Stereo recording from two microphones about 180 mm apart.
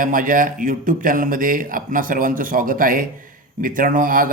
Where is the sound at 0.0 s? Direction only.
50° right (ahead or behind).